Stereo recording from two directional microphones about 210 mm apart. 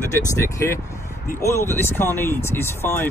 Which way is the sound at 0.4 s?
15° left (ahead or behind).